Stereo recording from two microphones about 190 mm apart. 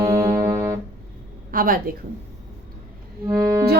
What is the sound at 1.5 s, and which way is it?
Speech, 45° right (ahead or behind).